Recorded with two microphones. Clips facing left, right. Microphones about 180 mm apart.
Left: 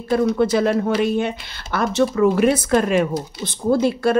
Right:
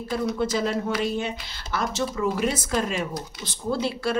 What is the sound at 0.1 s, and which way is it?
Speech, 65° left (ahead or behind).